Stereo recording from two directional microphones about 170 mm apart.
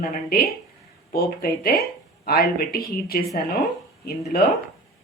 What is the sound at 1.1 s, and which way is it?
Speech, 65° left (ahead or behind).